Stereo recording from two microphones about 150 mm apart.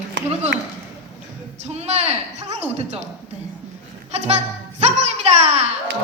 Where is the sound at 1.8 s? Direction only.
45° right (ahead or behind).